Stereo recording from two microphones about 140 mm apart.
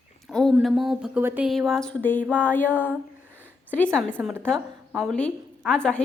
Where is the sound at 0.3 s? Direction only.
Centre (ahead or behind).